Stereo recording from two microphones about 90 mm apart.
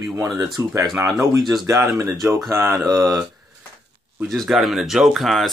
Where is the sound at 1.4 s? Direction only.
Centre (ahead or behind).